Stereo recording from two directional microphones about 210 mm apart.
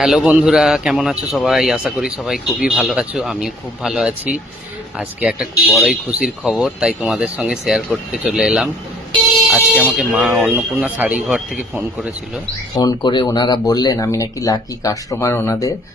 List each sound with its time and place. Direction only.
0.0 s speech: 5° right (ahead or behind)
12.7 s speech: 15° left (ahead or behind)